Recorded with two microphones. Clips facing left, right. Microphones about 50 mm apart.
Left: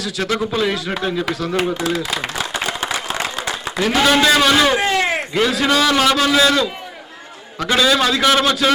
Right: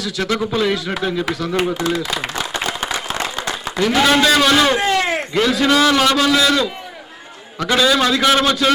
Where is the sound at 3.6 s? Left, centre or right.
Centre.